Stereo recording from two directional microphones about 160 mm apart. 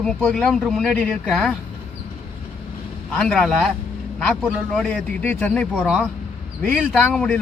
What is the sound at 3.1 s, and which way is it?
A man's voice, 5° left (ahead or behind).